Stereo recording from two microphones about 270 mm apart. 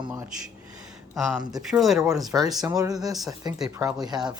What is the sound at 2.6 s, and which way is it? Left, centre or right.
Speech, centre.